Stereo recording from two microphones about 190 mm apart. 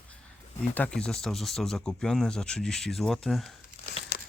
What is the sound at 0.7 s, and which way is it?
Speech, 5° left (ahead or behind).